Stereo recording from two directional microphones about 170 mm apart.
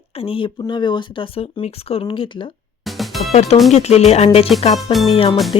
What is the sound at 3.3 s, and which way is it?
Speech, 40° left (ahead or behind).